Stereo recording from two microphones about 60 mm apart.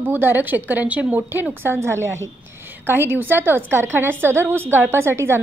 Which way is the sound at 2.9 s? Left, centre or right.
Right.